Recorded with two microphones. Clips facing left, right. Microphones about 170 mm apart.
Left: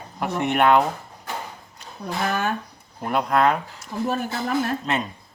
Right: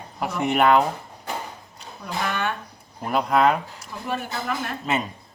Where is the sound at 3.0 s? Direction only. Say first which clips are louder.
Even; centre (ahead or behind).